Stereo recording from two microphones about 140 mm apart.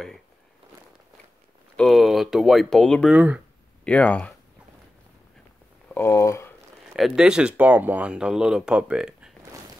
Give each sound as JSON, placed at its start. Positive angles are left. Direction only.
{"t": 1.8, "sound": "speech", "side_deg": 0}
{"t": 3.1, "sound": "speech", "side_deg": -10}
{"t": 3.8, "sound": "speech", "side_deg": 10}
{"t": 5.9, "sound": "speech", "side_deg": 20}
{"t": 7.0, "sound": "speech", "side_deg": -5}